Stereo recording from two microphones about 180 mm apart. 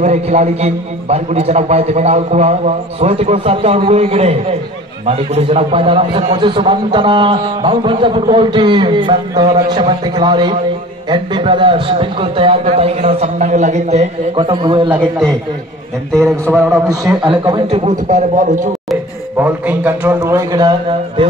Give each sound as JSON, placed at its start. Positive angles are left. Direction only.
{"t": 0.0, "sound": "a man's voice", "side_deg": -40}
{"t": 14.3, "sound": "a man's voice", "side_deg": -25}
{"t": 15.0, "sound": "a man's voice", "side_deg": -5}
{"t": 16.4, "sound": "a man's voice", "side_deg": -10}
{"t": 17.2, "sound": "a man's voice", "side_deg": -25}
{"t": 17.8, "sound": "a man's voice", "side_deg": -45}
{"t": 19.3, "sound": "a man's voice", "side_deg": -10}